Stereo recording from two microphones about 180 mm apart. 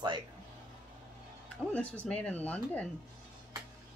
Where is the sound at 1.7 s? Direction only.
5° left (ahead or behind).